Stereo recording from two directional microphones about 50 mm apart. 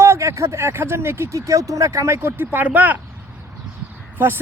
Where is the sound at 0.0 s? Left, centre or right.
Right.